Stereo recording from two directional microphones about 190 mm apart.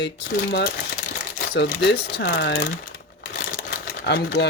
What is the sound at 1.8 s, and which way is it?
Speech, 65° left (ahead or behind).